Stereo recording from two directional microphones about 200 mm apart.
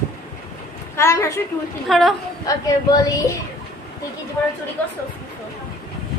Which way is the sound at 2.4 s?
20° left (ahead or behind).